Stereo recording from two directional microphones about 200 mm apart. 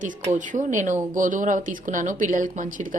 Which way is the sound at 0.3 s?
40° right (ahead or behind).